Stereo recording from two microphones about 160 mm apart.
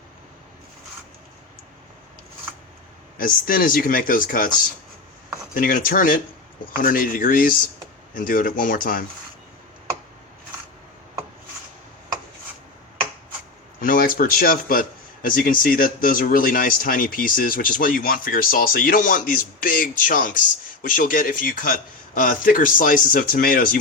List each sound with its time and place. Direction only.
3.2 s speech: 60° left (ahead or behind)
5.5 s speech: 60° left (ahead or behind)
13.8 s speech: 65° left (ahead or behind)